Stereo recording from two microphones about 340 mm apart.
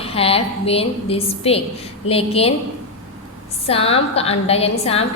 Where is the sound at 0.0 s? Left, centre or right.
Centre.